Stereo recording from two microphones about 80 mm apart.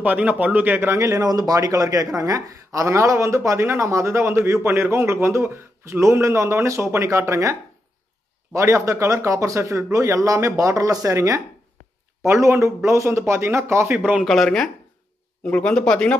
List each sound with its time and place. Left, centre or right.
0.0 s speech: right
8.5 s speech: right
13.8 s speech: right
14.2 s a man's voice: centre